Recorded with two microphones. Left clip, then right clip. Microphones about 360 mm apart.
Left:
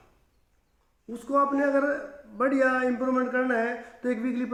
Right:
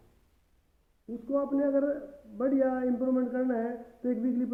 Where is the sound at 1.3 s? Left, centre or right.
Centre.